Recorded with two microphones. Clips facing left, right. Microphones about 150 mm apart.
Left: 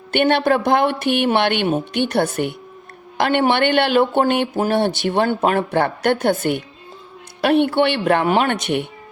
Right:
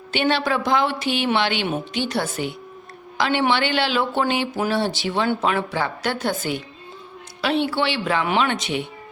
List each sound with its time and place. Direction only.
0.1 s speech: 55° left (ahead or behind)